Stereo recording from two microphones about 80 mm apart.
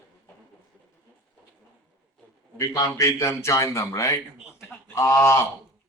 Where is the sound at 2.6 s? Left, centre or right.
Left.